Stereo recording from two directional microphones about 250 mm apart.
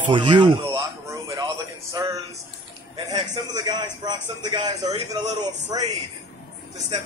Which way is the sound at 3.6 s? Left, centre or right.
Centre.